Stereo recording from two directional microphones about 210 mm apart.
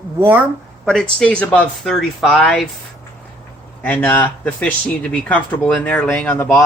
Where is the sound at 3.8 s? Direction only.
10° left (ahead or behind).